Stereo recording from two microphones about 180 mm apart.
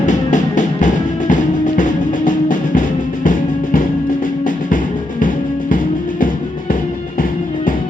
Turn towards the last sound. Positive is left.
turn(degrees=50)  # may be behind; listen again after turning